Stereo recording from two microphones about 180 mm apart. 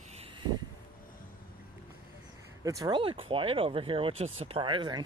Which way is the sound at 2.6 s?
20° right (ahead or behind).